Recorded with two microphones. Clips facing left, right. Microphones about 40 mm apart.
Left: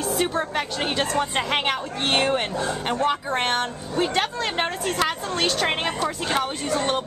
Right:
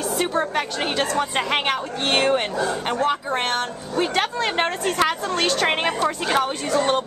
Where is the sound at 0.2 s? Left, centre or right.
Centre.